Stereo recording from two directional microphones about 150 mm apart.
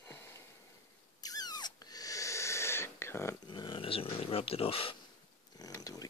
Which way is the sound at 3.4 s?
30° left (ahead or behind).